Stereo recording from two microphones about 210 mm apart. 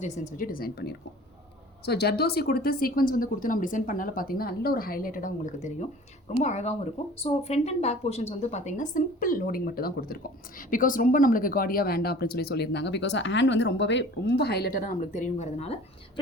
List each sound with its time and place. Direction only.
0.0 s speech: 40° left (ahead or behind)